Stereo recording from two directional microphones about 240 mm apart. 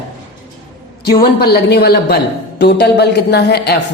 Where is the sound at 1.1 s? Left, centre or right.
Left.